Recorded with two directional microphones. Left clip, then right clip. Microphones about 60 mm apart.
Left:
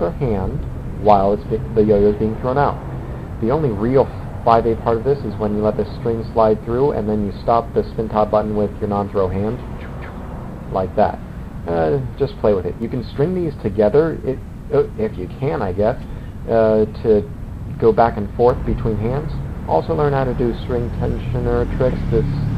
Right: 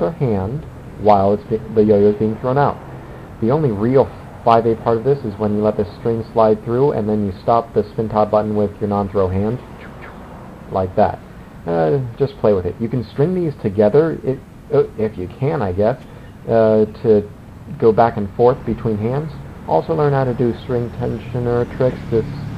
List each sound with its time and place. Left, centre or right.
0.0 s a man's voice: left
10.7 s a man's voice: left
20.3 s a man's voice: left
21.8 s speech: centre